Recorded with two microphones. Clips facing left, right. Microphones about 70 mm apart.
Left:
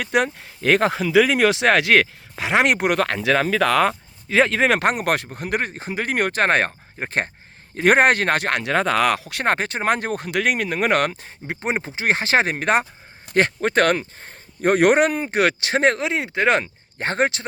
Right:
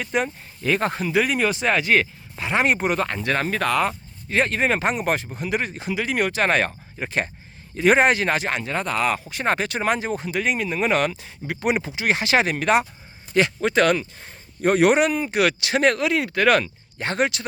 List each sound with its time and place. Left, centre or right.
0.0 s speech: left
5.3 s speech: left
9.6 s speech: left
9.9 s speech: left
11.4 s speech: left
17.0 s speech: left